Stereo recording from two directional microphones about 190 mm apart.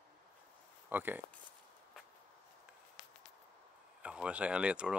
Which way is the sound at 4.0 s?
5° right (ahead or behind).